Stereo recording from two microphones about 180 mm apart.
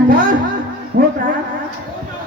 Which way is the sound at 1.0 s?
55° right (ahead or behind).